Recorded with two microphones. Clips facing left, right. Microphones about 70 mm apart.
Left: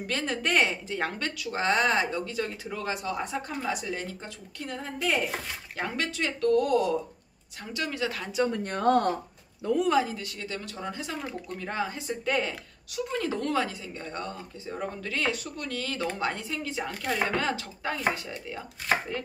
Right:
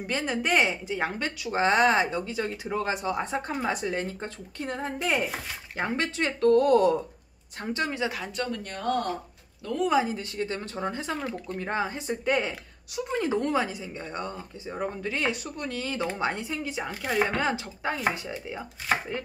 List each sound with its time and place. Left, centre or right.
0.0 s a woman's voice: centre
1.4 s a woman's voice: right
5.0 s speech: centre
5.8 s a woman's voice: right
7.6 s a woman's voice: right
8.6 s speech: left
9.6 s speech: centre
10.0 s a woman's voice: right
16.9 s speech: centre
17.4 s a woman's voice: centre